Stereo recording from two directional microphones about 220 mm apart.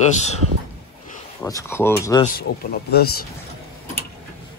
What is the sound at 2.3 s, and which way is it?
Speech, 45° left (ahead or behind).